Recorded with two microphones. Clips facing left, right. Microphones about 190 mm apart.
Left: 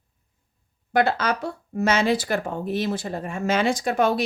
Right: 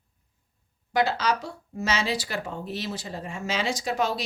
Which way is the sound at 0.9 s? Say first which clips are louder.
Left 3 dB; 55° left (ahead or behind).